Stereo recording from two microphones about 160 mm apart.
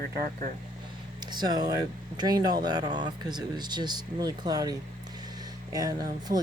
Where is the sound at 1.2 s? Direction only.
25° right (ahead or behind).